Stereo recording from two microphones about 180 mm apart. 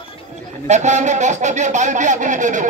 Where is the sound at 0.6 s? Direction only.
40° right (ahead or behind).